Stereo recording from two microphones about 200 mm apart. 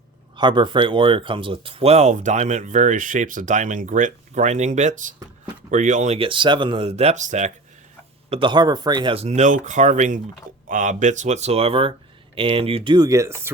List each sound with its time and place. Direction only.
0.3 s speech: 25° right (ahead or behind)
8.3 s speech: 25° right (ahead or behind)